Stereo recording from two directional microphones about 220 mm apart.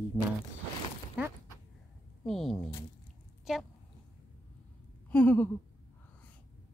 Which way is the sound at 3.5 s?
Centre (ahead or behind).